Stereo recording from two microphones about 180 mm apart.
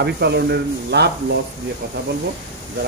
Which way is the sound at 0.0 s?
70° right (ahead or behind).